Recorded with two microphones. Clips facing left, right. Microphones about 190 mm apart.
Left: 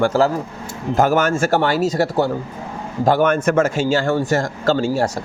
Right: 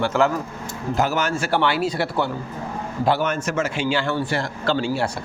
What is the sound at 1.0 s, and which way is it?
A man's voice, 50° left (ahead or behind).